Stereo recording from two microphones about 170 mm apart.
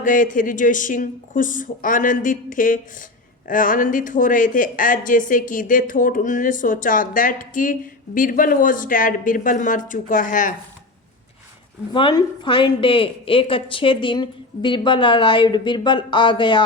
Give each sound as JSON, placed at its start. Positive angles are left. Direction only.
{"t": 0.0, "sound": "speech", "side_deg": 50}
{"t": 11.9, "sound": "a woman's voice", "side_deg": 30}